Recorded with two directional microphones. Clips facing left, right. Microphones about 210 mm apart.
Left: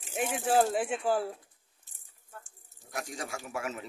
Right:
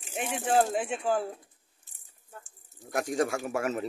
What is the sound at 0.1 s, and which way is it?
Speech, centre (ahead or behind).